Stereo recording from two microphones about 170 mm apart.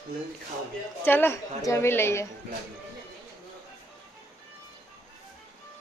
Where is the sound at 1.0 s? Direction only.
10° left (ahead or behind).